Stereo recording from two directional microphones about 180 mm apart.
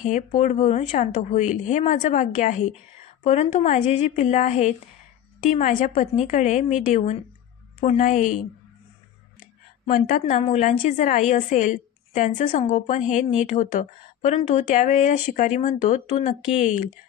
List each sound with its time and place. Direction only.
0.0 s a woman's voice: 45° left (ahead or behind)
9.8 s a woman's voice: 50° left (ahead or behind)
10.4 s speech: 35° left (ahead or behind)
10.8 s a woman's voice: 45° left (ahead or behind)